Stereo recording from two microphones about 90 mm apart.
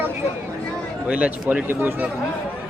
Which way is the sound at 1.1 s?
15° right (ahead or behind).